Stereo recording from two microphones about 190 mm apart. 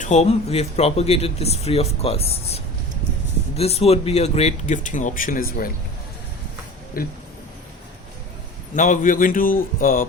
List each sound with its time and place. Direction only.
0.0 s speech: 35° left (ahead or behind)
7.0 s speech: 50° left (ahead or behind)
8.7 s speech: 40° left (ahead or behind)